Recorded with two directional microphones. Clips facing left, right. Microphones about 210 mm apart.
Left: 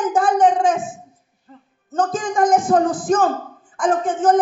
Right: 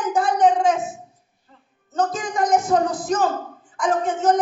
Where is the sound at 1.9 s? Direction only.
50° left (ahead or behind).